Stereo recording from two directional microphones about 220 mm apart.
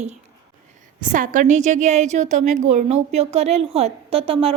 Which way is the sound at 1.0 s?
35° right (ahead or behind).